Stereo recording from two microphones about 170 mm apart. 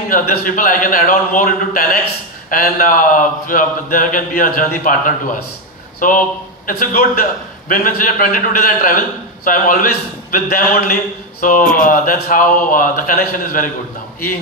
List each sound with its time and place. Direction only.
0.1 s a man's voice: 55° left (ahead or behind)